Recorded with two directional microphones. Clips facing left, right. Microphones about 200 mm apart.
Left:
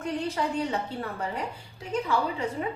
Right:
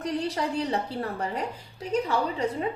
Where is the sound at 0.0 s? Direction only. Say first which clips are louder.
Right 1 dB; 35° right (ahead or behind).